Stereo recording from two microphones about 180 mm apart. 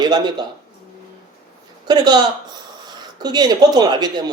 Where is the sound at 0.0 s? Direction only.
25° right (ahead or behind).